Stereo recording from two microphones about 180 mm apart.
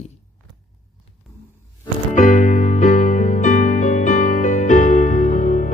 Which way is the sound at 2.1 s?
45° left (ahead or behind).